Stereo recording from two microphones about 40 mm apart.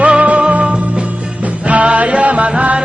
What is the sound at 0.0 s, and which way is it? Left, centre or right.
Music, right.